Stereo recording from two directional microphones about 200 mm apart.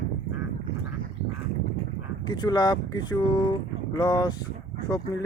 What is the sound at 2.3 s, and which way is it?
Speech, 20° left (ahead or behind).